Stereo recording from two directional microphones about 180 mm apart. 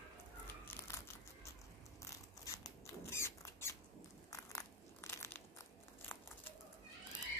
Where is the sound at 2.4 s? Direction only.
20° left (ahead or behind).